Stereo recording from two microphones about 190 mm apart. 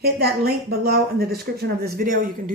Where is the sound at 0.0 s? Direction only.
55° right (ahead or behind).